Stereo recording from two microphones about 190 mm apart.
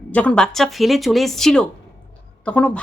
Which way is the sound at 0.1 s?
5° left (ahead or behind).